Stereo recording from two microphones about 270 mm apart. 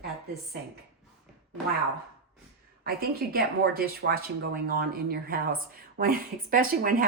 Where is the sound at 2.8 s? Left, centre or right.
Right.